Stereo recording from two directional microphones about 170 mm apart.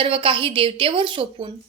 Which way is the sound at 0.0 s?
30° right (ahead or behind).